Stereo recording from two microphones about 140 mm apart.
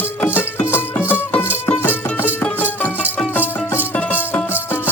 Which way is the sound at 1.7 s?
15° left (ahead or behind).